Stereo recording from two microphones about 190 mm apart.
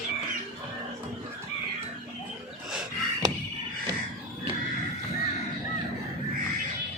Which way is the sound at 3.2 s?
20° right (ahead or behind).